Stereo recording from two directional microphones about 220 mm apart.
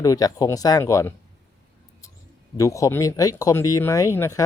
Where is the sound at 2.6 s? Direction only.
15° left (ahead or behind).